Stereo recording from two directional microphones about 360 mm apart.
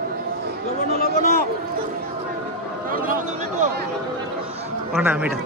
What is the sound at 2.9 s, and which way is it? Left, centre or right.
Speech, right.